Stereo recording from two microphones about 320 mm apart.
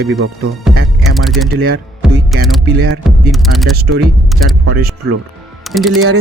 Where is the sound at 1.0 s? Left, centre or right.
Centre.